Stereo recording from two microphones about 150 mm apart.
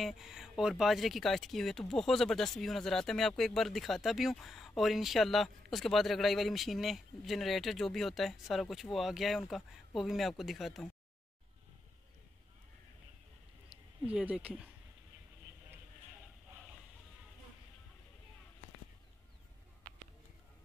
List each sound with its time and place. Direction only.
0.0 s speech: centre (ahead or behind)
13.7 s a sound: 35° right (ahead or behind)
14.0 s speech: 10° right (ahead or behind)